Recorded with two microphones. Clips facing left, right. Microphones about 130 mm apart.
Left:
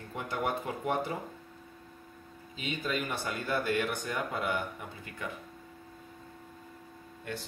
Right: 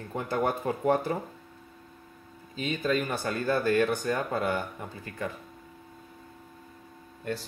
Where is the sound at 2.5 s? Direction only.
45° right (ahead or behind).